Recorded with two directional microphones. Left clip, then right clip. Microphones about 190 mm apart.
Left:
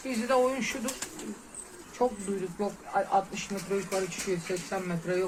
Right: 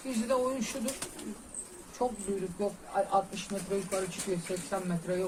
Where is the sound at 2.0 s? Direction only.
35° left (ahead or behind).